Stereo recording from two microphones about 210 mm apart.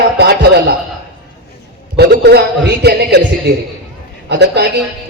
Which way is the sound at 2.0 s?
50° right (ahead or behind).